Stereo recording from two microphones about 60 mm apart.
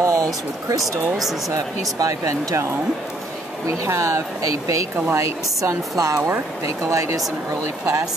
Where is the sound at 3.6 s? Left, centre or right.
Right.